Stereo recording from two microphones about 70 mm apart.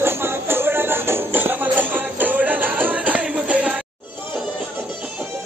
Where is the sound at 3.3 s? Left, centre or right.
Centre.